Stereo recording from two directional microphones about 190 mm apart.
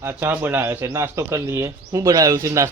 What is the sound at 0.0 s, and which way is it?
Speech, 10° right (ahead or behind).